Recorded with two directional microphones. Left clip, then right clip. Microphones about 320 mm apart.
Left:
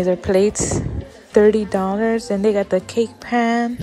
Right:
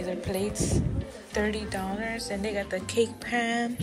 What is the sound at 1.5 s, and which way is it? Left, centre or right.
A woman's voice, centre.